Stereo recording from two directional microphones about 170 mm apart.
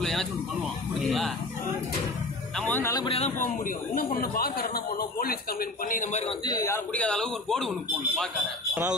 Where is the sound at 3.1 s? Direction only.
40° left (ahead or behind); by 6.8 s 20° left (ahead or behind).